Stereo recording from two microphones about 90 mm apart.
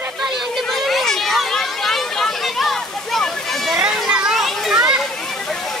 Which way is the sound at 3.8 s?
10° right (ahead or behind).